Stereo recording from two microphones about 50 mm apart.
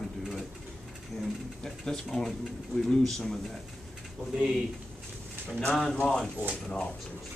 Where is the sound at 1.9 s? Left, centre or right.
Centre.